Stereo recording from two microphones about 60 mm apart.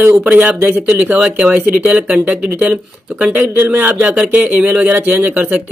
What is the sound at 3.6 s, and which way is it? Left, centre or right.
Speech, right.